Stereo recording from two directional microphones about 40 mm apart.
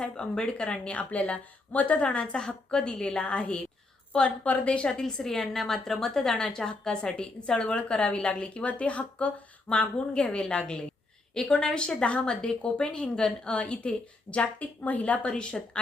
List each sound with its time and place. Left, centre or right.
0.2 s speech: left
2.0 s a woman's voice: left
4.9 s a woman's voice: centre